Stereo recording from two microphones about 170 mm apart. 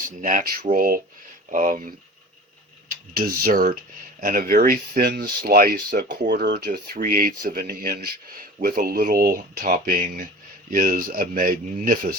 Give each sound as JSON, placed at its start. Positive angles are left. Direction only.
{"t": 0.2, "sound": "speech", "side_deg": -50}
{"t": 3.2, "sound": "speech", "side_deg": -55}